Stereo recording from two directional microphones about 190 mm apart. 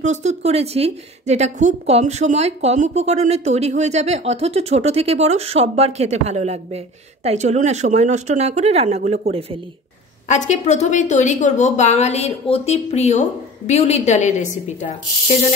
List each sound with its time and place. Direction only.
0.0 s a woman's voice: 35° right (ahead or behind)
10.2 s a woman's voice: 40° left (ahead or behind)